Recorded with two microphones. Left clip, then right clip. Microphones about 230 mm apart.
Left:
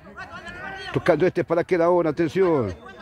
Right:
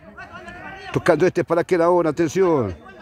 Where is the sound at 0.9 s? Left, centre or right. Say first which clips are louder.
Right 3 dB; right.